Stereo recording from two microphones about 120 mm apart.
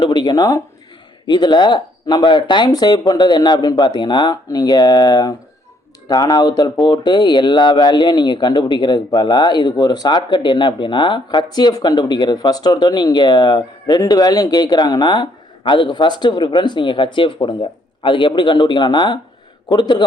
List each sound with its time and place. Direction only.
0.1 s speech: 35° left (ahead or behind)